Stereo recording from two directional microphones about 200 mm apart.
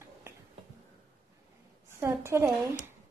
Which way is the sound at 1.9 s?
10° right (ahead or behind).